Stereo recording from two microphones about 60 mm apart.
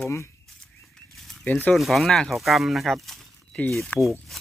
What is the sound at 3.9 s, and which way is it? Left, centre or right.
Speech, left.